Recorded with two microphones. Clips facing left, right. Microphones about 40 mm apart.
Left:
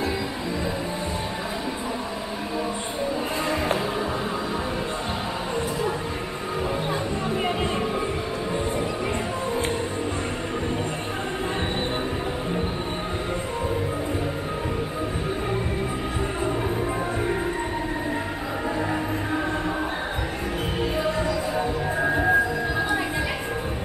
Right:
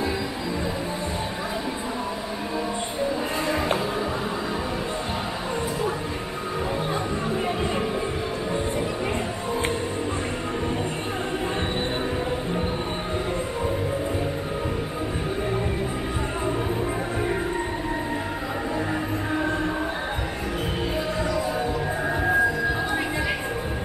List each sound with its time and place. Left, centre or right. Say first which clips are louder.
7.2 s music: left 2 dB; left
22.0 s music: left 4 dB; centre